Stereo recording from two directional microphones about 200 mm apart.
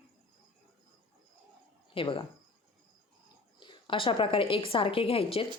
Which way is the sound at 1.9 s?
25° left (ahead or behind).